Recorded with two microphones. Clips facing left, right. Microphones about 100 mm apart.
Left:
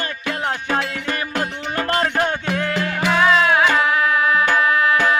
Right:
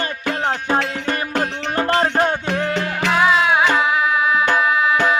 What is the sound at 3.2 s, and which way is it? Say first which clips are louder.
Music: even; 10° right (ahead or behind).